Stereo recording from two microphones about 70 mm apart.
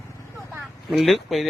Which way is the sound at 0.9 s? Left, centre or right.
Centre.